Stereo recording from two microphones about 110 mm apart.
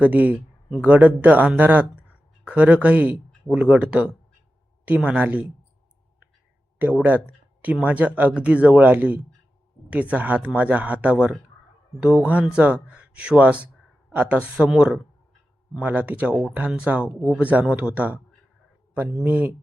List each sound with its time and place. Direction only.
0.0 s speech: 15° right (ahead or behind)
6.7 s speech: 15° right (ahead or behind)
19.2 s speech: 15° right (ahead or behind)